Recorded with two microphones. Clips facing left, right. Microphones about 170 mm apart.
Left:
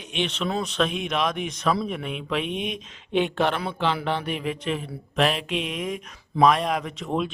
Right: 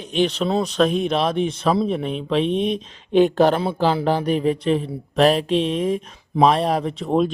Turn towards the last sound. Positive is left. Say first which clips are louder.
# right 7 dB
turn(degrees=-35)  # may be behind; listen again after turning